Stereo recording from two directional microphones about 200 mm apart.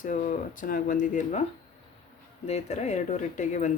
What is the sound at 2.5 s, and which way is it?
Speech, 35° left (ahead or behind).